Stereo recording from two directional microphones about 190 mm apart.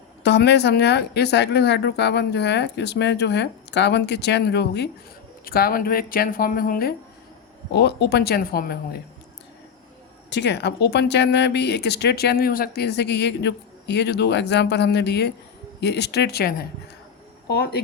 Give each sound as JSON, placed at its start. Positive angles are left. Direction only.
{"t": 0.2, "sound": "speech", "side_deg": 65}
{"t": 5.5, "sound": "speech", "side_deg": 50}
{"t": 7.7, "sound": "speech", "side_deg": 65}
{"t": 10.2, "sound": "speech", "side_deg": 65}